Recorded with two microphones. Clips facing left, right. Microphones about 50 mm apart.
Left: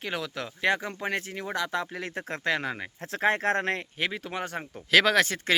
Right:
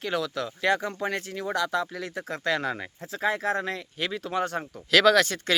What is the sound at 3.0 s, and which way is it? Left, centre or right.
Speech, left.